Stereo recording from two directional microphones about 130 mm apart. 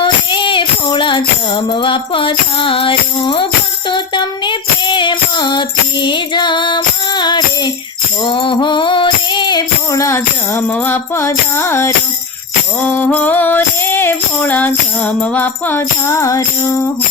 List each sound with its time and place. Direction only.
0.0 s music: 40° left (ahead or behind)